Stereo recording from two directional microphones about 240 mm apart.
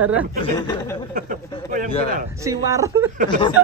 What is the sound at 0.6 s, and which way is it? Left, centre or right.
Speech, centre.